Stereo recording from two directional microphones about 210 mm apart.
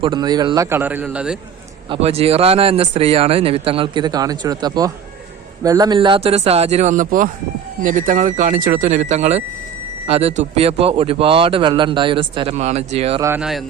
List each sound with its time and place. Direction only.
0.0 s a man's voice: 20° right (ahead or behind); by 1.4 s 5° right (ahead or behind)
1.9 s speech: 30° right (ahead or behind)
13.2 s a man's voice: 5° right (ahead or behind)